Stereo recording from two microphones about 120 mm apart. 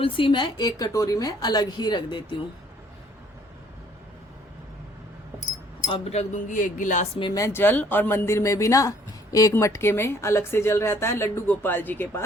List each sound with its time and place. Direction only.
0.0 s a woman's voice: 45° left (ahead or behind)
6.1 s speech: 75° left (ahead or behind); by 7.1 s 90° left
7.3 s speech: 20° left (ahead or behind)